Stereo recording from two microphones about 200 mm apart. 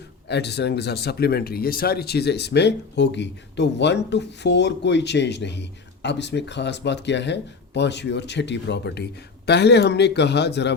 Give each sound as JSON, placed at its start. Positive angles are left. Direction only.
{"t": 0.3, "sound": "speech", "side_deg": 55}